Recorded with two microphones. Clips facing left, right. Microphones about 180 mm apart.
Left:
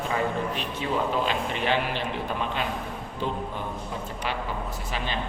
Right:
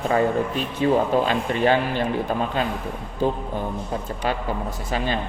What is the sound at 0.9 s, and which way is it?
A man's voice, 45° right (ahead or behind).